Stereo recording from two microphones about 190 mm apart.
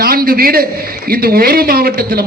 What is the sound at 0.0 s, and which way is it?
A man's voice, 50° right (ahead or behind).